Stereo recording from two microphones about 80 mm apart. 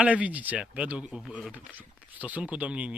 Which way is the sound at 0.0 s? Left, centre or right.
Centre.